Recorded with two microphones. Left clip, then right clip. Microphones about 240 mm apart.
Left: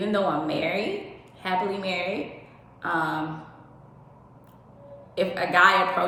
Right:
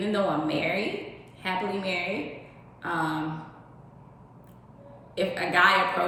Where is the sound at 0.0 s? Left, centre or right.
Centre.